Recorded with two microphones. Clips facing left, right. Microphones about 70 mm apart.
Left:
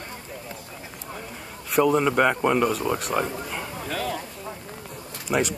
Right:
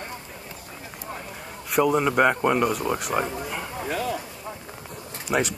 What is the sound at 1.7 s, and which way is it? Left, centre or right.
Speech, centre.